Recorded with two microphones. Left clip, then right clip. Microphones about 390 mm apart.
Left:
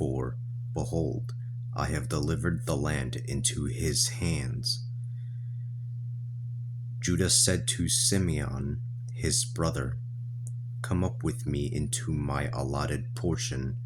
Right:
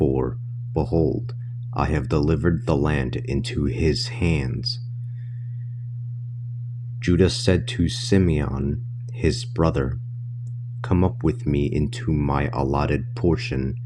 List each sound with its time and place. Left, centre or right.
0.0 s a sound: left
1.7 s speech: left
7.0 s speech: left